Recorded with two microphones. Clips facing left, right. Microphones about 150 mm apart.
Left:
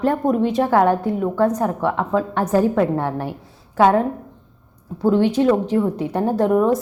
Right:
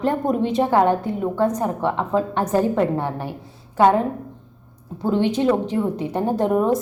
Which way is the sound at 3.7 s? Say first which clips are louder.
Left 1 dB; 5° left (ahead or behind).